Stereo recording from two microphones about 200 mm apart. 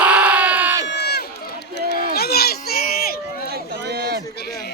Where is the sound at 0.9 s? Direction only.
55° left (ahead or behind).